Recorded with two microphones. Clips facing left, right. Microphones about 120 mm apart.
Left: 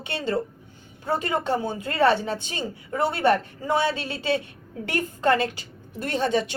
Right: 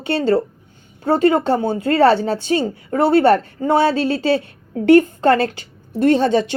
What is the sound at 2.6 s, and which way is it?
Speech, 55° right (ahead or behind).